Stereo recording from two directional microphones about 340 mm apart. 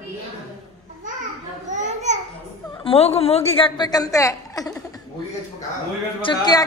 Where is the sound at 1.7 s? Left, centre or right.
Right.